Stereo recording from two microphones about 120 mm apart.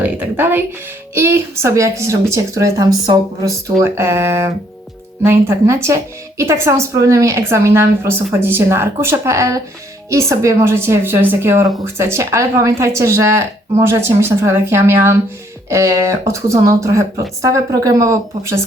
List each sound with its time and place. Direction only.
0.0 s a woman's voice: 15° right (ahead or behind)